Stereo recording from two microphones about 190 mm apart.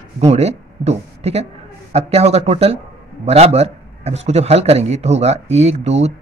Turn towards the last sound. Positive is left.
turn(degrees=-35)  # may be behind; listen again after turning